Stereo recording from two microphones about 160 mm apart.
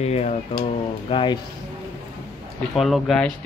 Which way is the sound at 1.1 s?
30° left (ahead or behind).